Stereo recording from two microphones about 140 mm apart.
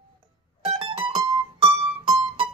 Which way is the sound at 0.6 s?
40° right (ahead or behind).